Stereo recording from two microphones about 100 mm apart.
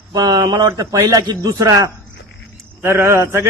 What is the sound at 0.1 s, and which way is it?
A man's voice, 40° right (ahead or behind).